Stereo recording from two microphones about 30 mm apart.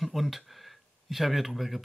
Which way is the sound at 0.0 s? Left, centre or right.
Centre.